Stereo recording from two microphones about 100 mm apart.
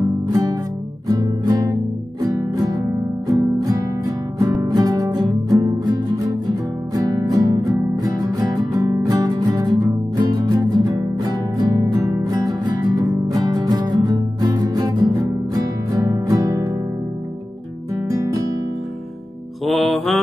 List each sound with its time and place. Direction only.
0.3 s music: 35° right (ahead or behind)
18.1 s guitar: 35° right (ahead or behind)
19.6 s music: centre (ahead or behind)